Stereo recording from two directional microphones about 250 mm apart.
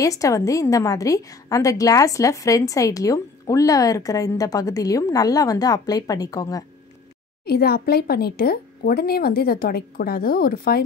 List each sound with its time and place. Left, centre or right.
0.0 s a woman's voice: centre
7.4 s speech: left